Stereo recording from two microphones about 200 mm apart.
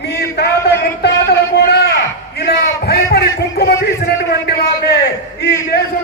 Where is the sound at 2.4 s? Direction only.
50° left (ahead or behind).